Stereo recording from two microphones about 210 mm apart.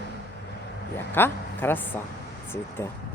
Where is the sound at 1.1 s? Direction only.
10° left (ahead or behind).